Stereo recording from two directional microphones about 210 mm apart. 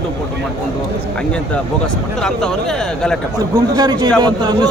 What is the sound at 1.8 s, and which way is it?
Speech, 5° left (ahead or behind).